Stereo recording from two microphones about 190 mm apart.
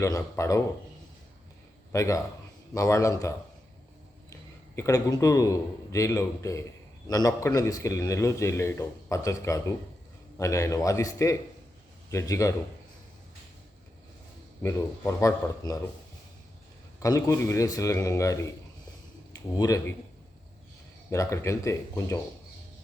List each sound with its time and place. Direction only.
0.0 s speech: 15° left (ahead or behind)
1.9 s a man's voice: 15° left (ahead or behind)
14.6 s speech: 15° left (ahead or behind)
17.0 s speech: 15° left (ahead or behind)
19.5 s speech: 20° left (ahead or behind)
21.1 s speech: 15° left (ahead or behind)